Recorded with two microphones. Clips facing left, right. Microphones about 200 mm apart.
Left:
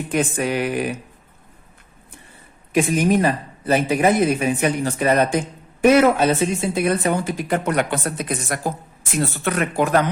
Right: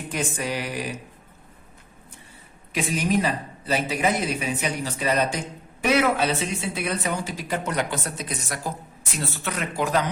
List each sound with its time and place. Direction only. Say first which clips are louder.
0.1 s speech: left 7 dB; 60° left (ahead or behind)
2.7 s speech: left 6 dB; 50° left (ahead or behind)